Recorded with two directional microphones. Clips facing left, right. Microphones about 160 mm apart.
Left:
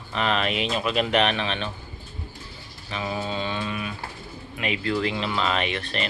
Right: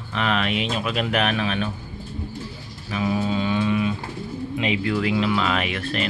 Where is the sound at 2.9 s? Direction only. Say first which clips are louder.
Right 6 dB; 5° right (ahead or behind).